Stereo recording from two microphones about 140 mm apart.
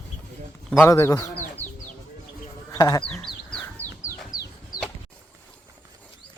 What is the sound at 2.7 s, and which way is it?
Speech, 25° left (ahead or behind).